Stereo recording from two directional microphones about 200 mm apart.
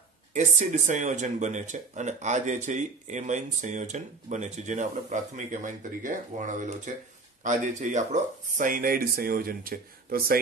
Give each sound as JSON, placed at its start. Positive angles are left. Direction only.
{"t": 0.3, "sound": "speech", "side_deg": -35}